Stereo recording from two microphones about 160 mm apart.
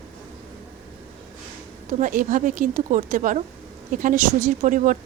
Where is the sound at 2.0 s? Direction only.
55° right (ahead or behind).